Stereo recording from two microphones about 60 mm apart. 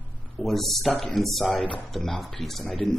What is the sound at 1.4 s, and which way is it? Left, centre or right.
Speech, left.